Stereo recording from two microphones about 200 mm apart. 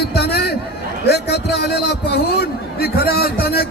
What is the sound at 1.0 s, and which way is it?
A man's voice, 55° left (ahead or behind).